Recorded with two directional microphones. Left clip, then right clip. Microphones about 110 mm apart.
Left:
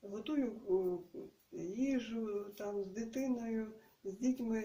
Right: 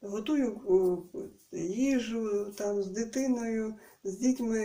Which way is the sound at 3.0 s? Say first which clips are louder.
Right 8 dB; 15° left (ahead or behind).